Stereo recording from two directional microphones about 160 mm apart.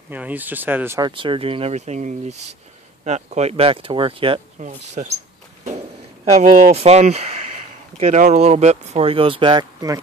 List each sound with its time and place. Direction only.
0.1 s speech: 10° right (ahead or behind)
1.0 s speech: 30° right (ahead or behind)
4.6 s speech: 45° right (ahead or behind)
6.4 s speech: 40° right (ahead or behind); by 10.0 s 25° right (ahead or behind)